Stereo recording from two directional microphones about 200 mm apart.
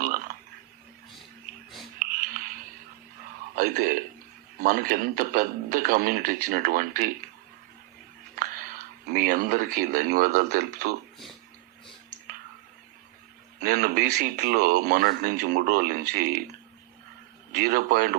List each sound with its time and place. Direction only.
2.0 s a sound: 45° right (ahead or behind)
3.5 s speech: 45° right (ahead or behind)
8.4 s speech: 45° right (ahead or behind)
13.6 s speech: 45° right (ahead or behind)
17.5 s speech: 45° right (ahead or behind)